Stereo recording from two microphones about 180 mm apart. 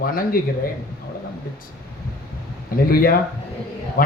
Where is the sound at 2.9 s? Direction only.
55° left (ahead or behind).